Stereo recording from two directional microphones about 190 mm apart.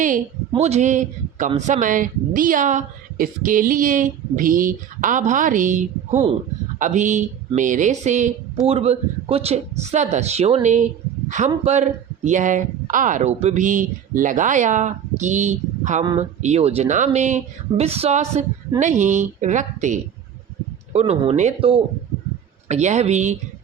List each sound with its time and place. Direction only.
0.5 s a man's voice: 35° right (ahead or behind)